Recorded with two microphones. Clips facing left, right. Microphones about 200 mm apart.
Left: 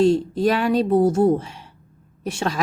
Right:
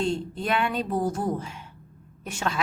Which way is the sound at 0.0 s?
40° left (ahead or behind).